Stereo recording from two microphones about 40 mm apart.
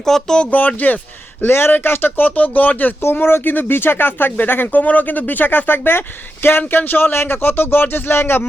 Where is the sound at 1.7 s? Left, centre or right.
Left.